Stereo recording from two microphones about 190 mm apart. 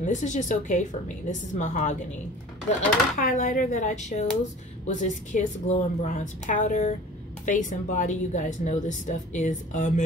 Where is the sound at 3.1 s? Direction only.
40° left (ahead or behind).